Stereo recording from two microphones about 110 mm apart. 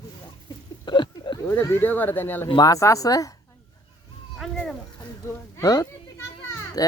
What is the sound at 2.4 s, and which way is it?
Speech, 40° left (ahead or behind).